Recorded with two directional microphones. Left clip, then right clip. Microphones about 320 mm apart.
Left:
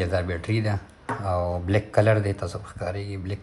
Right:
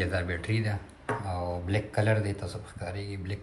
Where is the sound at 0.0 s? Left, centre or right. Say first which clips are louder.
Left 5 dB; centre.